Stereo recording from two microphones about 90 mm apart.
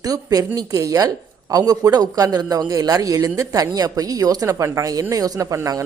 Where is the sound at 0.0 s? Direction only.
40° right (ahead or behind).